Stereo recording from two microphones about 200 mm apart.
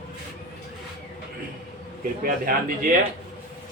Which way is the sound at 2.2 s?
45° right (ahead or behind).